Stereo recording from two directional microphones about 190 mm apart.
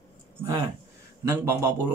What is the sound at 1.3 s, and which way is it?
Speech, 15° right (ahead or behind).